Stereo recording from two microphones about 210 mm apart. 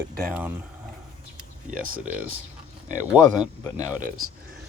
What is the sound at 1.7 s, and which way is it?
Speech, 40° right (ahead or behind).